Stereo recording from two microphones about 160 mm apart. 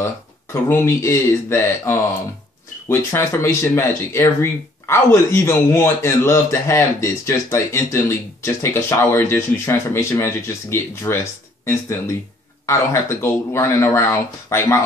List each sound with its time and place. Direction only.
0.0 s speech: 15° left (ahead or behind)
12.6 s speech: 15° left (ahead or behind)